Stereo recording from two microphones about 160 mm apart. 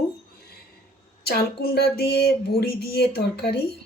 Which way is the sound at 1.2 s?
75° left (ahead or behind).